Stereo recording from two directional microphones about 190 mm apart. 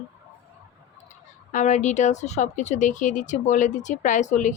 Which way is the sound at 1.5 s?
40° left (ahead or behind).